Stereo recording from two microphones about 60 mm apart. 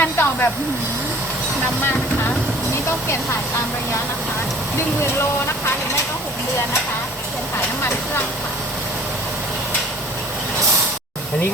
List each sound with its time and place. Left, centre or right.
0.0 s speech: left